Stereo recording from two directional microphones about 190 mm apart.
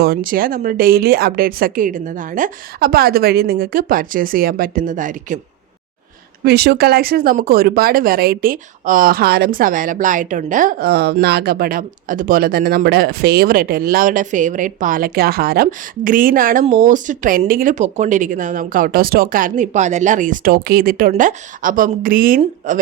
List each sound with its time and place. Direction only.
0.0 s speech: 50° right (ahead or behind)
6.4 s speech: 60° right (ahead or behind); by 22.8 s 40° right (ahead or behind)